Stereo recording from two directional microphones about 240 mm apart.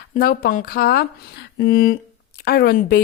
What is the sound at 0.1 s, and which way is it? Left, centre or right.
A woman's voice, left.